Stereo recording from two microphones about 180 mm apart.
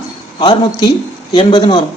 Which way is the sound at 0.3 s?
30° left (ahead or behind).